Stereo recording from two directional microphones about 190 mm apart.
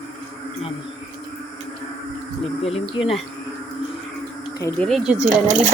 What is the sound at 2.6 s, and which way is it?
Speech, 30° left (ahead or behind).